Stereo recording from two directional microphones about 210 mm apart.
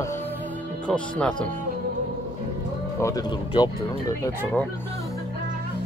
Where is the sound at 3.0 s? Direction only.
20° left (ahead or behind).